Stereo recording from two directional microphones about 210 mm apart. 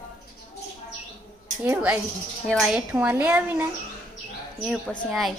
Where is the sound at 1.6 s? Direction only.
10° right (ahead or behind).